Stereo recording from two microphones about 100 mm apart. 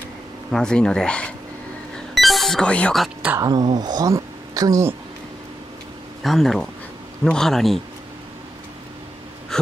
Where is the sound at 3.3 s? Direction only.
40° right (ahead or behind).